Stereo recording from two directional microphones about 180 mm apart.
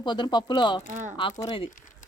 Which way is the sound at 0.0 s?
25° left (ahead or behind).